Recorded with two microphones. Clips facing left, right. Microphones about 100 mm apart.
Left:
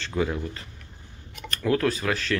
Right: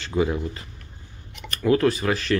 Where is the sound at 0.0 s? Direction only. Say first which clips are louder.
Right 4 dB; 5° right (ahead or behind).